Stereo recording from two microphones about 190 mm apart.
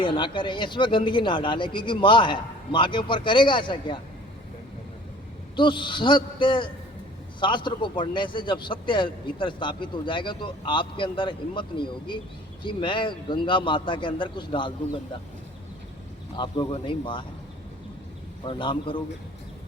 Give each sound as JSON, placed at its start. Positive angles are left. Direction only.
{"t": 0.0, "sound": "a man's voice", "side_deg": 25}
{"t": 5.5, "sound": "a man's voice", "side_deg": 25}
{"t": 16.3, "sound": "a man's voice", "side_deg": 25}
{"t": 18.4, "sound": "a man's voice", "side_deg": 25}